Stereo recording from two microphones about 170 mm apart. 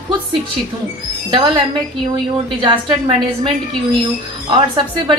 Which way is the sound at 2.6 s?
25° right (ahead or behind).